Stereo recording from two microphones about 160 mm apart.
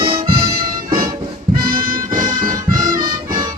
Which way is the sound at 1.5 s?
60° right (ahead or behind).